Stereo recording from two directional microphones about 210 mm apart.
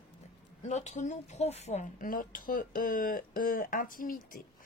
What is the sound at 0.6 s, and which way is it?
Speech, 35° left (ahead or behind).